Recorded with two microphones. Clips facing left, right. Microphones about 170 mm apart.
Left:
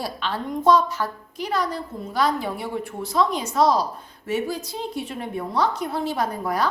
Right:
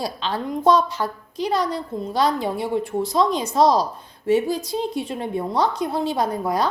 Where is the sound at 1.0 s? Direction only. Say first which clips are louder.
Right 3 dB; 25° right (ahead or behind).